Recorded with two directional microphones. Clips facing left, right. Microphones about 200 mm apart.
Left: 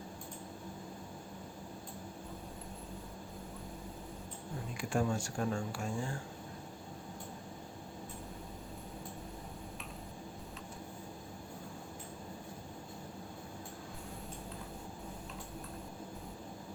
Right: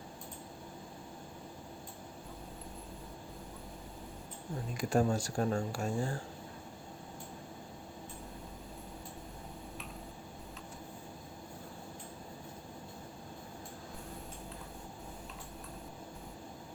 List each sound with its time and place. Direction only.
4.8 s speech: 40° right (ahead or behind)